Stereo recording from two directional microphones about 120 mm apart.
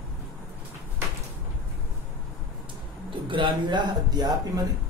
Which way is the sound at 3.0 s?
45° right (ahead or behind).